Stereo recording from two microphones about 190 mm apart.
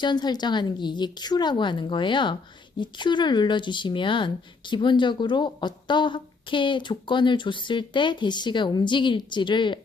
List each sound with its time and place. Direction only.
0.0 s speech: 20° left (ahead or behind)